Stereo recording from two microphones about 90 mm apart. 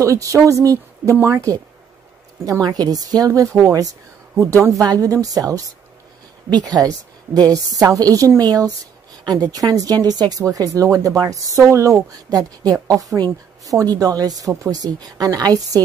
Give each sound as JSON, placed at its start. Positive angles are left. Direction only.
{"t": 0.0, "sound": "speech", "side_deg": -35}
{"t": 2.6, "sound": "speech", "side_deg": -45}